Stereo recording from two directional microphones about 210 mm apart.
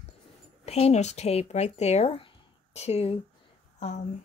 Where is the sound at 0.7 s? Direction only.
30° left (ahead or behind).